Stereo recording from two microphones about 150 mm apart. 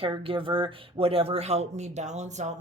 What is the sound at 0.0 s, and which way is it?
Speech, 35° right (ahead or behind).